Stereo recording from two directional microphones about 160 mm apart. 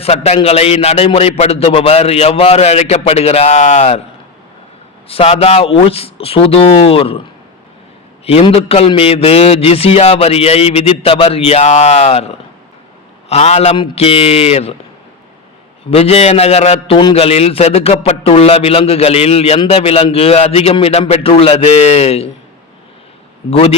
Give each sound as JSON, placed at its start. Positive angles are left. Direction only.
{"t": 0.0, "sound": "a man's voice", "side_deg": 40}
{"t": 5.0, "sound": "a man's voice", "side_deg": 40}
{"t": 8.2, "sound": "a man's voice", "side_deg": 40}
{"t": 15.9, "sound": "a man's voice", "side_deg": 40}
{"t": 23.5, "sound": "a man's voice", "side_deg": 40}